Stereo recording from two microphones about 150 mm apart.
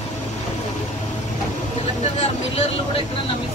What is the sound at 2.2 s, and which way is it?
Speech, 45° left (ahead or behind).